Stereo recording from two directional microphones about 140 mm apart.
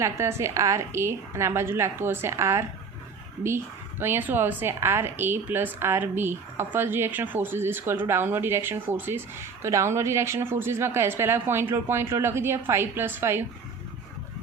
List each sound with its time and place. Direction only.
0.0 s a woman's voice: 20° right (ahead or behind)
4.0 s a woman's voice: 15° right (ahead or behind)